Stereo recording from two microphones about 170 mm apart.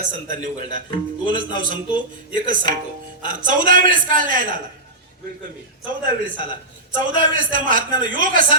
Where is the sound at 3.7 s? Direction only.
50° right (ahead or behind).